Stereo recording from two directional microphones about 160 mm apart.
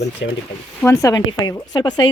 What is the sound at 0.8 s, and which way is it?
Speech, 20° left (ahead or behind).